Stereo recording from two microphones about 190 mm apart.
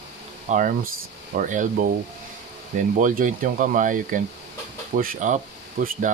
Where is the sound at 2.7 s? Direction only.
45° right (ahead or behind).